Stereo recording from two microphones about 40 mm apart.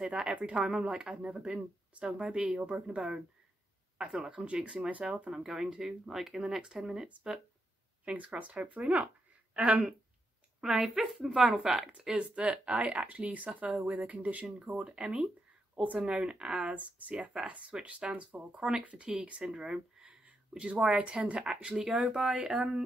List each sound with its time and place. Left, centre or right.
0.0 s speech: right
4.3 s speech: right
5.3 s speech: centre
8.0 s speech: right
10.6 s speech: centre
12.2 s speech: right
13.0 s speech: right
16.5 s speech: right
17.1 s speech: right
19.5 s speech: centre
20.2 s a sound: right
20.8 s speech: right; by 22.8 s centre